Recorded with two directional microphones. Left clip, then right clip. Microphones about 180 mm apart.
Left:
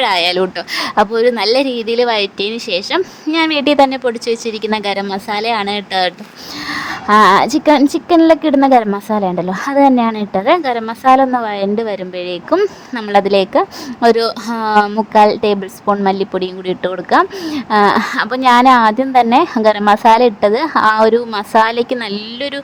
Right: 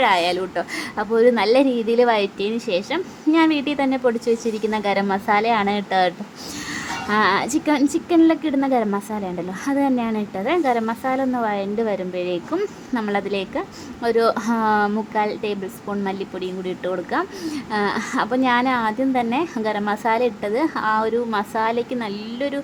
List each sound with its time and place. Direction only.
0.0 s a woman's voice: 35° left (ahead or behind)
6.7 s a woman's voice: 35° left (ahead or behind)